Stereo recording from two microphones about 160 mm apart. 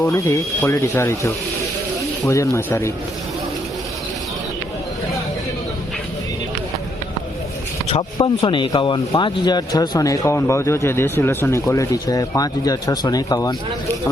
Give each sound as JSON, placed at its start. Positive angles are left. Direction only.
{"t": 0.1, "sound": "speech", "side_deg": 20}
{"t": 7.9, "sound": "speech", "side_deg": 35}